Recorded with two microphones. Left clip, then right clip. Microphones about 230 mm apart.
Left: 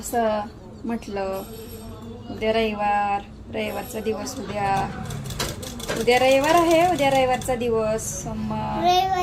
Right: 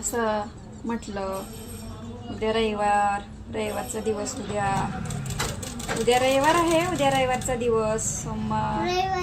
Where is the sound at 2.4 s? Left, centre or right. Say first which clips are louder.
Left 2 dB; centre.